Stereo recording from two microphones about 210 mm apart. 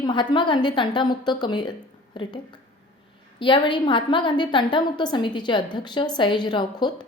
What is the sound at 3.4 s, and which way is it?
A woman's voice, 20° left (ahead or behind).